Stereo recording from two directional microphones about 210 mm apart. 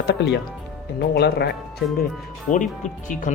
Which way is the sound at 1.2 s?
50° left (ahead or behind).